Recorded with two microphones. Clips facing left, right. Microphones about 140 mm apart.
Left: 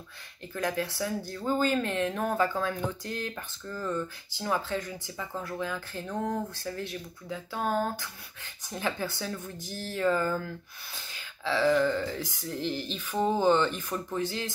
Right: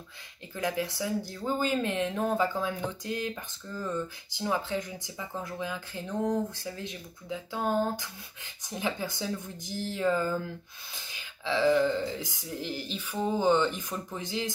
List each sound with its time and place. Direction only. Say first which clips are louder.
0.6 s speech: even; 15° right (ahead or behind)